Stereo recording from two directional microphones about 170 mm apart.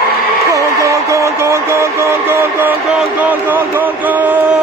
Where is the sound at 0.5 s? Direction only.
15° right (ahead or behind).